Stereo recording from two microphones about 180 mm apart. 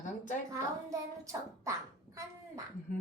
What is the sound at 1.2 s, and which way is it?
Beatboxing, 15° right (ahead or behind).